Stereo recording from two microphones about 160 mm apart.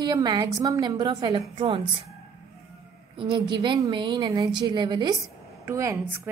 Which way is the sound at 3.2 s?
30° right (ahead or behind).